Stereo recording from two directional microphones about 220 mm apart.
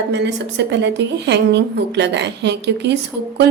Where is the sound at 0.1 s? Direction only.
50° right (ahead or behind).